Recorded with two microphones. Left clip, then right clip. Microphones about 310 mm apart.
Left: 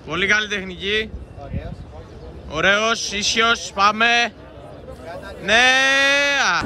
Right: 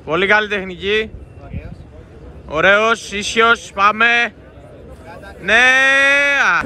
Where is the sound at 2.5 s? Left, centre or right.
Centre.